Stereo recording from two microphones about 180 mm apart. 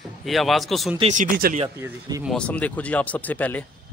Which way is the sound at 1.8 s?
15° right (ahead or behind).